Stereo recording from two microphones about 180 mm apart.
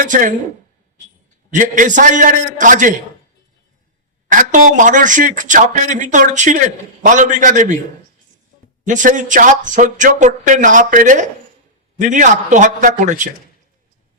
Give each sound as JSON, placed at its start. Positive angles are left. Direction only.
{"t": 0.0, "sound": "speech", "side_deg": -50}
{"t": 1.5, "sound": "speech", "side_deg": -45}
{"t": 4.3, "sound": "speech", "side_deg": -45}
{"t": 8.8, "sound": "speech", "side_deg": -45}